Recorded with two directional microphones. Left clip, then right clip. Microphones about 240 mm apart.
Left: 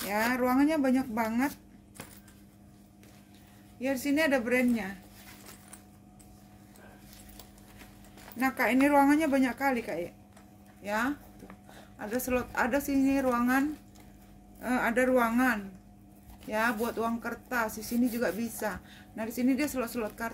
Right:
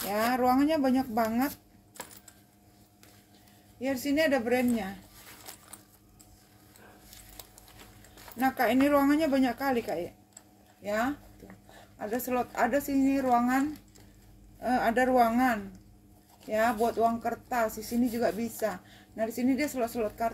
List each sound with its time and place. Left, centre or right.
0.1 s speech: centre
2.0 s a sound: centre
3.8 s speech: centre
8.4 s speech: centre